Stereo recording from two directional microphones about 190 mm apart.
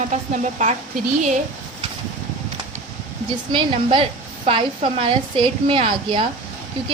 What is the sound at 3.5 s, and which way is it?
A woman's voice, 25° right (ahead or behind).